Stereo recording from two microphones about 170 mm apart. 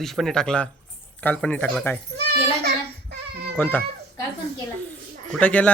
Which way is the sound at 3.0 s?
65° right (ahead or behind).